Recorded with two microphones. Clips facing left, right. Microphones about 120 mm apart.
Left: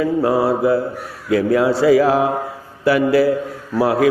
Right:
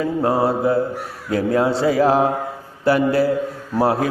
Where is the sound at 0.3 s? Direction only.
25° right (ahead or behind).